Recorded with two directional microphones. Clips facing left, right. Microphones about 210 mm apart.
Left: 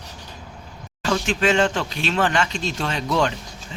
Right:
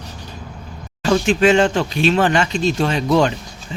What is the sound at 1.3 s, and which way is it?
Speech, 10° right (ahead or behind).